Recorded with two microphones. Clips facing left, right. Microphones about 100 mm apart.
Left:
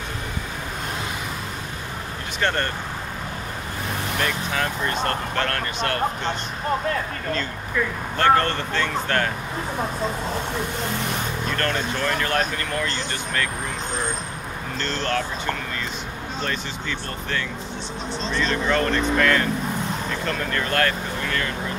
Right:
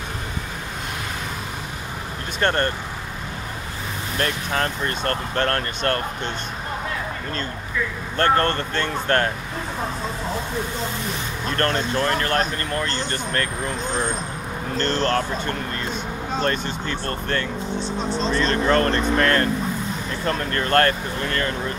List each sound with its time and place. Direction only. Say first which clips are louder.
2.4 s speech: right 3 dB; 40° right (ahead or behind)
5.3 s speech: right 2 dB; 40° right (ahead or behind)
8.2 s speech: even; 45° right (ahead or behind)
11.5 s speech: right 5 dB; 40° right (ahead or behind)
14.8 s speech: right 4 dB; 45° right (ahead or behind)
16.3 s speech: right 5 dB; 45° right (ahead or behind)